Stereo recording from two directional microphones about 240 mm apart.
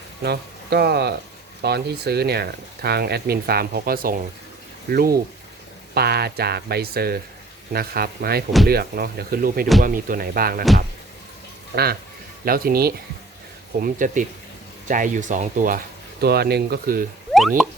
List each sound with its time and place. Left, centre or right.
0.2 s speech: right
11.7 s speech: right